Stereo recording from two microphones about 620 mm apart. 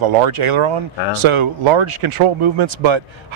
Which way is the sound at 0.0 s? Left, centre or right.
Right.